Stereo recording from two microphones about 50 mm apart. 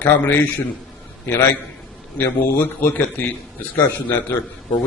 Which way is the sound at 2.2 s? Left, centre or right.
Left.